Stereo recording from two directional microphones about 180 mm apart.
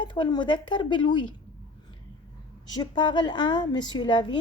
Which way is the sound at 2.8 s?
25° left (ahead or behind).